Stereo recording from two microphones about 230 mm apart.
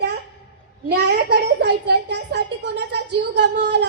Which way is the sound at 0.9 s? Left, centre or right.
Right.